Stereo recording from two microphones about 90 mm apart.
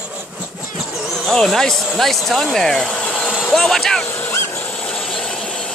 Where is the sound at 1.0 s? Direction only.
Centre (ahead or behind).